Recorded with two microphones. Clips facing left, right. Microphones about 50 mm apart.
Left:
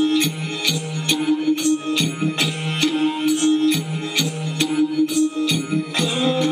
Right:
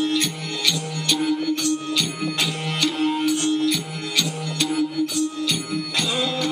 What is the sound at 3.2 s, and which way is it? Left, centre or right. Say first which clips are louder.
Music: left 4 dB; left.